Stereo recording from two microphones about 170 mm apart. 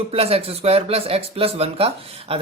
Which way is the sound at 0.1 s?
35° right (ahead or behind).